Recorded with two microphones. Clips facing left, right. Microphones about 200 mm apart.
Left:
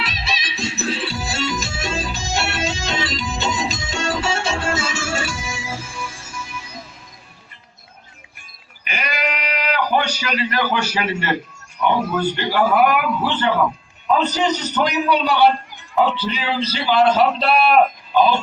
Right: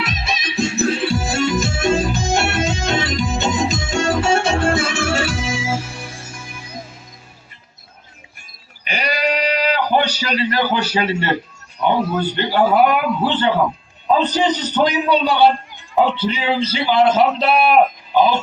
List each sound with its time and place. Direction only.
0.0 s music: 50° right (ahead or behind)
9.0 s male singing: 35° right (ahead or behind)
10.2 s a sound: 30° right (ahead or behind)
12.1 s a man's voice: 30° right (ahead or behind)